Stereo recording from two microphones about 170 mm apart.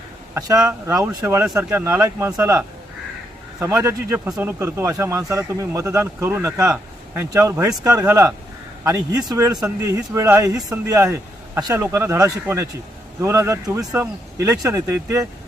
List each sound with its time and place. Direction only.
0.3 s speech: 20° right (ahead or behind)